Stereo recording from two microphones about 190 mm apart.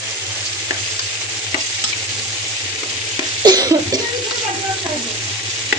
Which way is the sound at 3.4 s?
20° right (ahead or behind).